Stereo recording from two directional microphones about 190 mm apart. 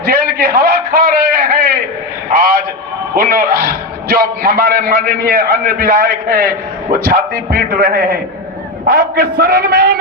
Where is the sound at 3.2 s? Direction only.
50° right (ahead or behind).